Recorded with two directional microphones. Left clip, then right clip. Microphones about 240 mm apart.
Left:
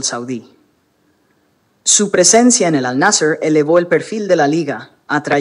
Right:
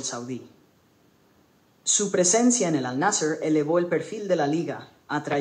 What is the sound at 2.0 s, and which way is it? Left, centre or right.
Speech, left.